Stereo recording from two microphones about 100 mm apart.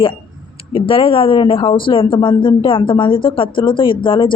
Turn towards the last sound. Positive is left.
turn(degrees=55)  # may be behind; listen again after turning